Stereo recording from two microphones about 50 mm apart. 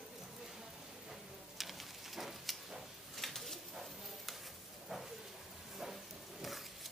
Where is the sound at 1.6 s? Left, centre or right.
Centre.